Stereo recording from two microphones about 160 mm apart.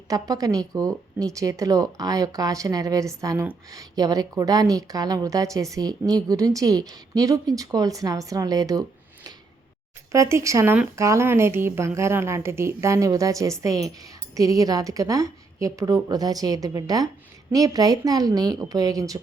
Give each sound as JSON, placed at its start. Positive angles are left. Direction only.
{"t": 0.1, "sound": "a woman's voice", "side_deg": -20}
{"t": 10.1, "sound": "a woman's voice", "side_deg": -20}